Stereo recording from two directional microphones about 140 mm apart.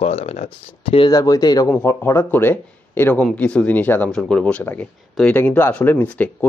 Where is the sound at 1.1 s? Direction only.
25° left (ahead or behind).